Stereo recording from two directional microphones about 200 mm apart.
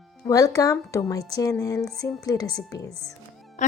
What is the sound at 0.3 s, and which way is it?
Speech, 15° left (ahead or behind).